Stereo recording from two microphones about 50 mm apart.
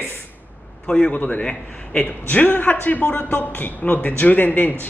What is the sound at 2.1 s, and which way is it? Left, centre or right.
A man's voice, left.